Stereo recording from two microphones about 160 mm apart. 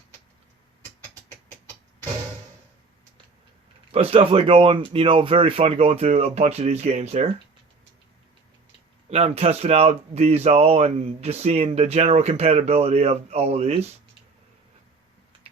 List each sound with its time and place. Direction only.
3.9 s speech: 35° right (ahead or behind)
9.0 s speech: 40° right (ahead or behind)